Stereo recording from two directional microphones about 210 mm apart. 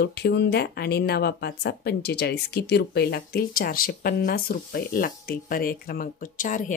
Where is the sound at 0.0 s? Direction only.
50° left (ahead or behind).